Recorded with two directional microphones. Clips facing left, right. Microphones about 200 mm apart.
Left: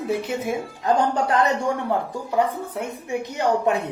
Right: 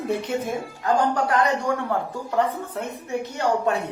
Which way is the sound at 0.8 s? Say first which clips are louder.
Left 1 dB; 25° left (ahead or behind).